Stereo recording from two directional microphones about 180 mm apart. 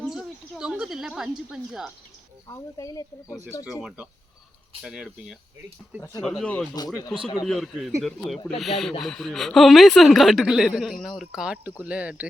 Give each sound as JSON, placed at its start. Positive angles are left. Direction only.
{"t": 0.0, "sound": "speech", "side_deg": 0}
{"t": 2.5, "sound": "speech", "side_deg": 20}
{"t": 3.8, "sound": "speech", "side_deg": -5}
{"t": 6.2, "sound": "speech", "side_deg": 5}
{"t": 6.7, "sound": "speech", "side_deg": 20}
{"t": 7.4, "sound": "speech", "side_deg": 0}